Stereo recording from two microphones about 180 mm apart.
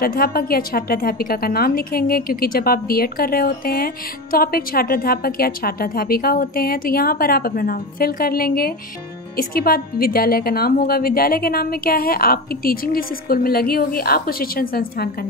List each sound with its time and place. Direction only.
0.0 s a woman's voice: 55° left (ahead or behind)